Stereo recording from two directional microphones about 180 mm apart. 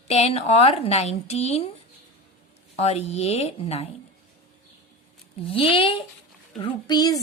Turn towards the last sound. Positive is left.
turn(degrees=20)  # may be behind; listen again after turning